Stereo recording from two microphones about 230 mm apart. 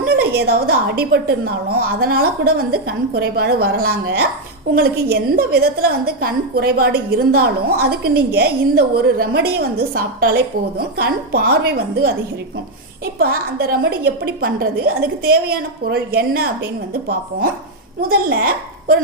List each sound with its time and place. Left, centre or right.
0.0 s a woman's voice: right
13.1 s a woman's voice: right
18.1 s a woman's voice: right